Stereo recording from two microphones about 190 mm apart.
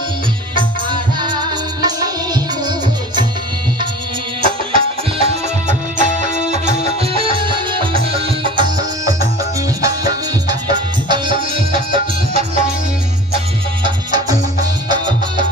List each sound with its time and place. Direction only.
0.6 s music: 25° right (ahead or behind)
4.4 s music: 30° right (ahead or behind)
13.8 s music: 20° right (ahead or behind)